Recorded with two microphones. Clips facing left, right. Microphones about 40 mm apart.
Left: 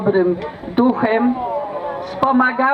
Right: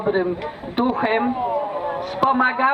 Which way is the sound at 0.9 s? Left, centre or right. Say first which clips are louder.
Left 3 dB; right.